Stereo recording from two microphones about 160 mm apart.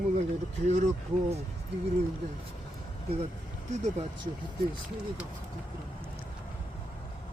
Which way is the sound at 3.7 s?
50° right (ahead or behind).